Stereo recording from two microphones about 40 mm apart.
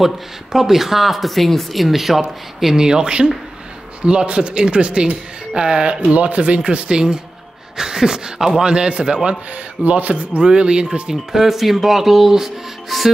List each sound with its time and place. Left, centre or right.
0.0 s speech: centre
2.6 s a man's voice: centre
9.8 s speech: right
10.4 s a man's voice: right
11.1 s speech: centre